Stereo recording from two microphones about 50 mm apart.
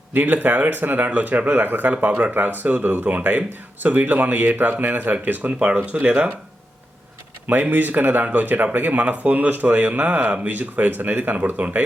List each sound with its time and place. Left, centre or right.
0.1 s speech: right
5.5 s speech: right
7.4 s speech: right